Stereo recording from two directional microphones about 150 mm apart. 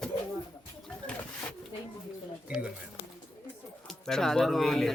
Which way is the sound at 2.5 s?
5° right (ahead or behind).